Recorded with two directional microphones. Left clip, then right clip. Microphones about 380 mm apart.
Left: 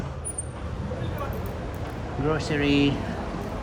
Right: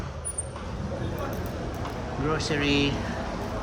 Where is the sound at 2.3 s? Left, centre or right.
Centre.